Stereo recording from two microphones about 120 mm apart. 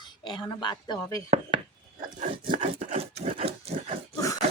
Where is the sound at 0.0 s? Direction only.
40° left (ahead or behind).